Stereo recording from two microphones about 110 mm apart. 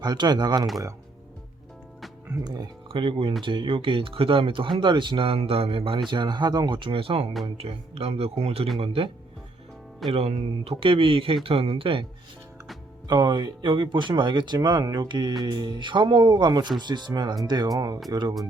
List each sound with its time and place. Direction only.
0.0 s speech: 40° right (ahead or behind)
2.4 s speech: 35° right (ahead or behind)
2.9 s speech: 50° right (ahead or behind)
10.1 s speech: 65° right (ahead or behind)
13.1 s speech: 40° right (ahead or behind)